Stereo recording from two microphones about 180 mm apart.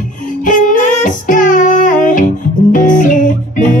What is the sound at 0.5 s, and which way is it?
Music, 45° left (ahead or behind).